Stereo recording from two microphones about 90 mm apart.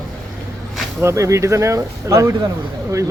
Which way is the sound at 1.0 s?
35° right (ahead or behind).